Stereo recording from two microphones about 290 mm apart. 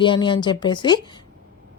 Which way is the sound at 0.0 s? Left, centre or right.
Centre.